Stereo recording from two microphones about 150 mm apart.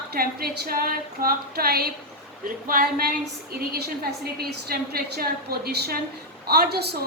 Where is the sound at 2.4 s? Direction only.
70° right (ahead or behind).